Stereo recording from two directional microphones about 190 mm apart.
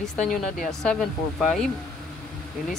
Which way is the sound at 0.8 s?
5° left (ahead or behind).